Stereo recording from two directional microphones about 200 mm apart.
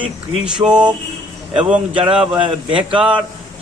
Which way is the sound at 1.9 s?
25° right (ahead or behind).